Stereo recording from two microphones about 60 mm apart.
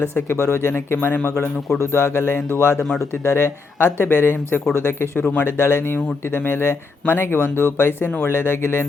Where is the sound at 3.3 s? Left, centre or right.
Left.